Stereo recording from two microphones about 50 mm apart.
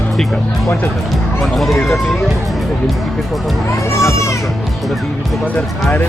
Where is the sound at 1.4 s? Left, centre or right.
Centre.